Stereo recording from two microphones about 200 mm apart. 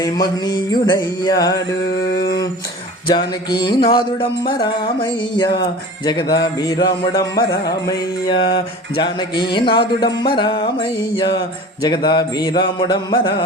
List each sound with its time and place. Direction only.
0.0 s music: 20° left (ahead or behind)